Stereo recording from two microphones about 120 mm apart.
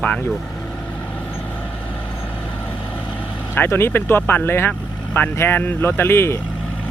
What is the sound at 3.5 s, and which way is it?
Speech, 20° left (ahead or behind).